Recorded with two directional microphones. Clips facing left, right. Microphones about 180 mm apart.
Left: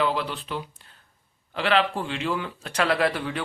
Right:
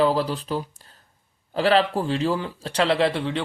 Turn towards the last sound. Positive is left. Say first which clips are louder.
# right 3 dB
turn(degrees=-25)  # may be behind; listen again after turning